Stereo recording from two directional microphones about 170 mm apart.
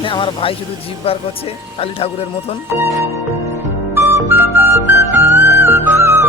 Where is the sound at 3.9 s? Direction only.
15° right (ahead or behind).